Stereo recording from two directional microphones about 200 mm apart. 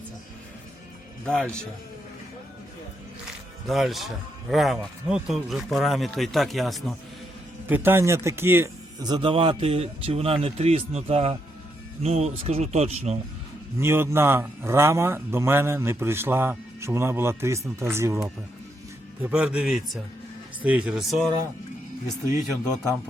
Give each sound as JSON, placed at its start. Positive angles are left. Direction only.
{"t": 1.2, "sound": "speech", "side_deg": 5}
{"t": 3.7, "sound": "speech", "side_deg": 0}
{"t": 7.7, "sound": "speech", "side_deg": -10}
{"t": 13.7, "sound": "a man's voice", "side_deg": -10}
{"t": 19.2, "sound": "speech", "side_deg": -5}